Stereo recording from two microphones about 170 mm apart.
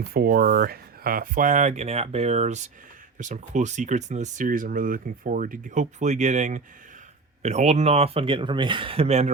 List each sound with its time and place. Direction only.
0.1 s speech: 60° right (ahead or behind); by 9.3 s 40° right (ahead or behind)